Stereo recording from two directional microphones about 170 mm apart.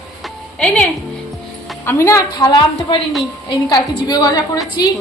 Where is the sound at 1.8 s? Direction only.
15° left (ahead or behind).